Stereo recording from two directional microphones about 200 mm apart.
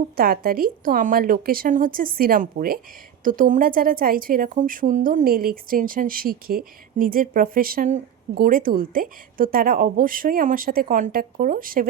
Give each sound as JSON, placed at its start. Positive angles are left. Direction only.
{"t": 0.2, "sound": "a woman's voice", "side_deg": -50}